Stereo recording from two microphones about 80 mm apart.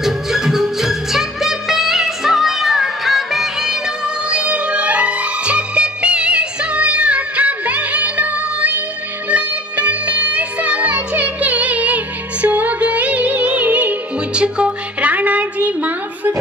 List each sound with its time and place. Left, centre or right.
0.0 s music: centre
4.3 s music: centre